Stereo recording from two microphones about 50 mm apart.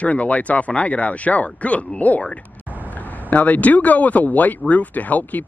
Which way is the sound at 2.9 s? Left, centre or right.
Left.